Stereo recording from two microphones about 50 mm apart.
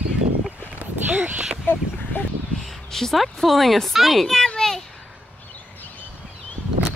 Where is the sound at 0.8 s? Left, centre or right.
Right.